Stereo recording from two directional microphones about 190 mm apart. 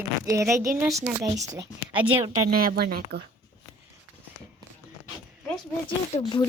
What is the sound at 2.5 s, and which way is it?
Speech, 50° right (ahead or behind).